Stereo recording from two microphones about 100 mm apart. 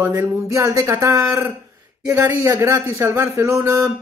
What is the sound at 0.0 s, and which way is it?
A woman's voice, 30° right (ahead or behind).